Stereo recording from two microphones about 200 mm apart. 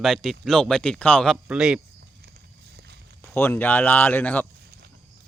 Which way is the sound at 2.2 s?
55° right (ahead or behind).